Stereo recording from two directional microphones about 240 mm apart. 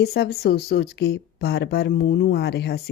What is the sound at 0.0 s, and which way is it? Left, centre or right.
Speech, left.